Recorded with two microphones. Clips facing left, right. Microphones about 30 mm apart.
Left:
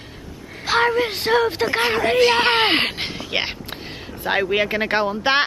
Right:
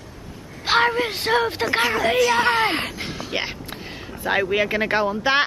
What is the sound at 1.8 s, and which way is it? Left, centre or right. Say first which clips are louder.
Speech: left 3 dB; left.